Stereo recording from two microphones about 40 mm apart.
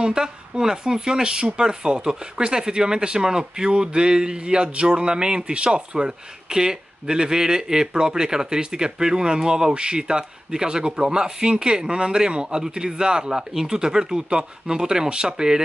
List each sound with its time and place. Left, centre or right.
0.0 s speech: centre